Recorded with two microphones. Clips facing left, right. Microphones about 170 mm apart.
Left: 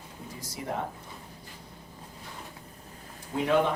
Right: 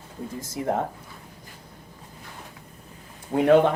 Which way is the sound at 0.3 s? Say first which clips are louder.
Right 8 dB; 50° right (ahead or behind).